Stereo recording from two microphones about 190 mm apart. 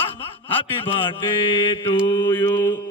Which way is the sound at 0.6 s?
30° left (ahead or behind).